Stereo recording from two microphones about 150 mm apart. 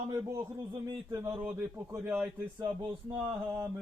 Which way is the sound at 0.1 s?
20° right (ahead or behind).